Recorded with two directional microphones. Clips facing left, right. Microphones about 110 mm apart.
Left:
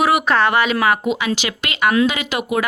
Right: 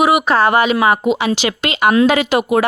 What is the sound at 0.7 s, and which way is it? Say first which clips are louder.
Speech: right 4 dB; 25° right (ahead or behind).